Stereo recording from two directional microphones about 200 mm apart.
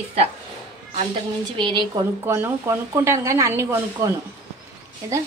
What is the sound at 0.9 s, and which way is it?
Speech, 25° right (ahead or behind).